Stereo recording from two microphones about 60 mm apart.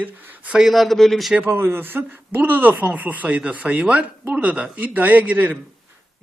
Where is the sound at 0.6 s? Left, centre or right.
Centre.